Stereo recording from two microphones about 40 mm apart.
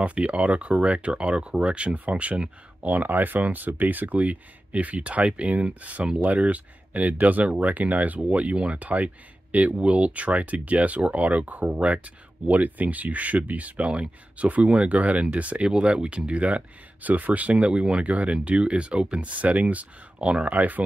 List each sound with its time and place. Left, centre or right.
0.0 s speech: right
2.9 s speech: right
12.4 s speech: right
18.0 s speech: right
20.2 s speech: right
20.4 s speech: right